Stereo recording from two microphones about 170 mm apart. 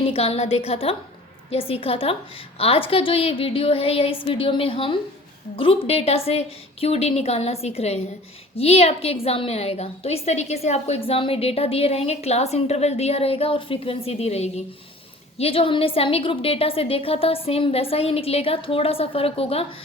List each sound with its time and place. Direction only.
0.0 s a woman's voice: 35° left (ahead or behind)